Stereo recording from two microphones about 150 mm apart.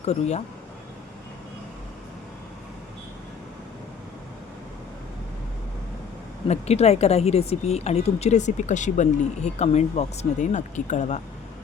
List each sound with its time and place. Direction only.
0.0 s speech: 45° left (ahead or behind)
6.5 s speech: 45° left (ahead or behind)